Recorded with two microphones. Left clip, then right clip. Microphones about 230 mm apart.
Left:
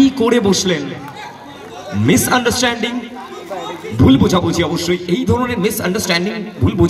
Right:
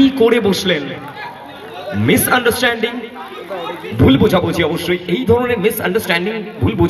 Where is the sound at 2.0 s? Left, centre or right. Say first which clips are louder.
Right 1 dB; left.